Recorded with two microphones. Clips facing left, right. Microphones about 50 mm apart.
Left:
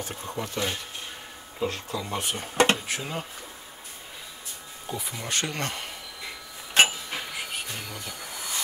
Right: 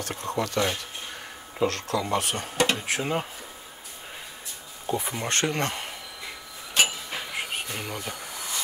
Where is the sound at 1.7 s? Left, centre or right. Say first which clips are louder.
Right 5 dB; right.